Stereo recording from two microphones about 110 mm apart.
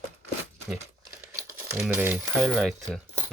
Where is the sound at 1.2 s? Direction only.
25° right (ahead or behind).